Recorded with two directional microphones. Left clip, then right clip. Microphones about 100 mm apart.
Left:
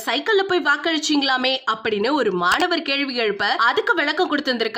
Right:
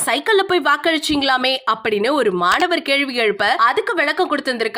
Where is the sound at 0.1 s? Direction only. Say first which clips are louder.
Right 3 dB; 35° right (ahead or behind).